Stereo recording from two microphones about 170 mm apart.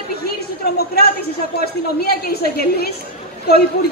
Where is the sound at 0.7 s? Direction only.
65° left (ahead or behind).